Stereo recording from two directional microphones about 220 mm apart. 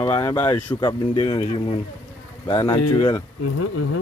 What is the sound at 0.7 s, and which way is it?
Speech, 20° left (ahead or behind).